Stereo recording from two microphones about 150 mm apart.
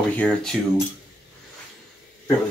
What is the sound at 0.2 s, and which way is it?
Speech, 5° left (ahead or behind).